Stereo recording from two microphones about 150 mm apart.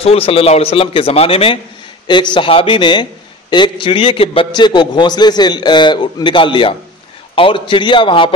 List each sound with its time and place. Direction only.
0.0 s a man's voice: 40° left (ahead or behind)